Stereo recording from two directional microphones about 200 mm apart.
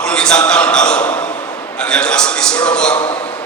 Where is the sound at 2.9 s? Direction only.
25° left (ahead or behind).